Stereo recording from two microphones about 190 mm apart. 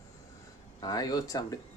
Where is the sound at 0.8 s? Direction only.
20° left (ahead or behind).